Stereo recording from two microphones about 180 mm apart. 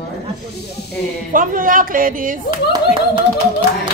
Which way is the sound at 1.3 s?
50° right (ahead or behind).